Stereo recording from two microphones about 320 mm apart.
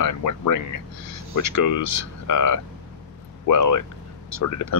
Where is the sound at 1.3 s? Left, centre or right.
Left.